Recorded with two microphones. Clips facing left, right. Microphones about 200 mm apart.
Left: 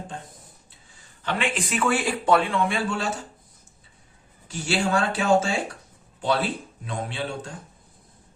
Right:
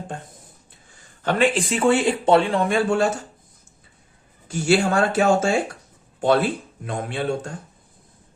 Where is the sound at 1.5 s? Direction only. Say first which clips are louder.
Right 6 dB; 30° right (ahead or behind).